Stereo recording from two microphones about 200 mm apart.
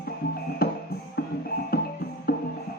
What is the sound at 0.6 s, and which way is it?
Music, 50° left (ahead or behind).